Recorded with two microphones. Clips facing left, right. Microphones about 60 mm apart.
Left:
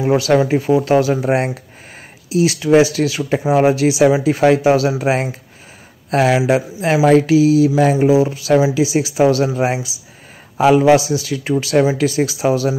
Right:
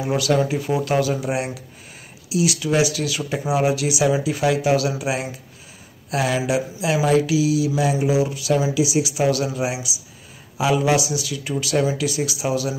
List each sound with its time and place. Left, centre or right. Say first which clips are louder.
0.0 s speech: left 6 dB; left